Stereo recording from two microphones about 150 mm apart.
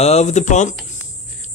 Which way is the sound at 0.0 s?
45° left (ahead or behind).